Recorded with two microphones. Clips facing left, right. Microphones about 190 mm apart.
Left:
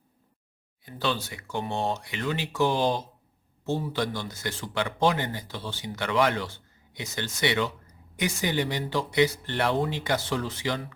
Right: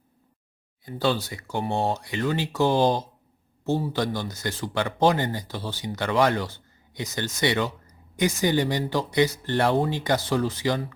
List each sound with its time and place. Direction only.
0.9 s speech: 35° right (ahead or behind)